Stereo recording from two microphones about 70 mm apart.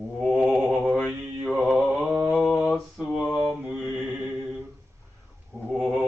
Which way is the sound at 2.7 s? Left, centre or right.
Centre.